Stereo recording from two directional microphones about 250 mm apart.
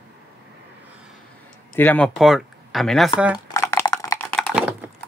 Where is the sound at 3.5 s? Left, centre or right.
Centre.